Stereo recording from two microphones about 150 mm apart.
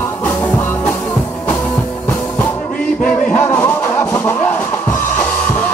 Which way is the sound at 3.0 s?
10° left (ahead or behind).